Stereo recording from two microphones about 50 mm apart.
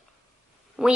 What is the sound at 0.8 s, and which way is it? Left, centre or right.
Speech, centre.